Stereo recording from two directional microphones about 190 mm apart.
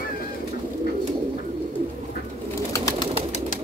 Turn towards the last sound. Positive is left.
turn(degrees=20)  # may be behind; listen again after turning